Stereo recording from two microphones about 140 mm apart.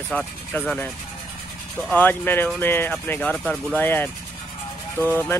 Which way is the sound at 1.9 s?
10° left (ahead or behind).